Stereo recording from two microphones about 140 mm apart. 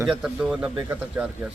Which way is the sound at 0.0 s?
5° right (ahead or behind).